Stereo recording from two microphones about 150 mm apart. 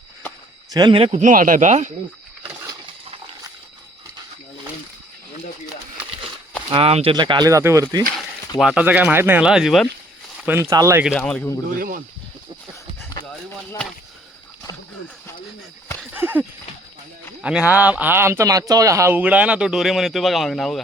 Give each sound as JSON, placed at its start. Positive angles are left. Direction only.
{"t": 0.7, "sound": "a man's voice", "side_deg": -30}
{"t": 1.2, "sound": "speech", "side_deg": -60}
{"t": 6.7, "sound": "speech", "side_deg": -40}
{"t": 8.6, "sound": "speech", "side_deg": -10}
{"t": 10.4, "sound": "speech", "side_deg": -15}
{"t": 11.1, "sound": "speech", "side_deg": 10}
{"t": 11.8, "sound": "speech", "side_deg": -70}
{"t": 16.1, "sound": "a sound", "side_deg": -15}
{"t": 17.4, "sound": "speech", "side_deg": -5}